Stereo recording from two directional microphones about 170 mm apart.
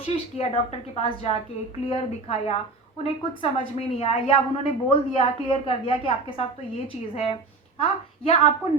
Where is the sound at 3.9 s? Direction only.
35° left (ahead or behind).